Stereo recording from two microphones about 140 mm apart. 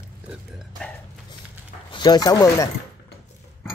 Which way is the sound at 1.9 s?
30° left (ahead or behind).